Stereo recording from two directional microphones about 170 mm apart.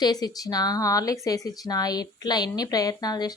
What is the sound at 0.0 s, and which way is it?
Speech, 25° left (ahead or behind).